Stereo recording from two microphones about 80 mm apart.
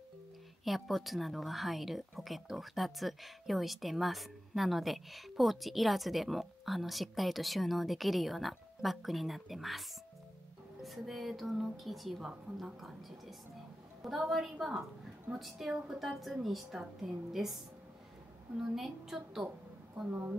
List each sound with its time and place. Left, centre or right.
0.7 s a woman's voice: centre
14.0 s a woman's voice: centre
18.6 s a woman's voice: centre
20.1 s a woman's voice: right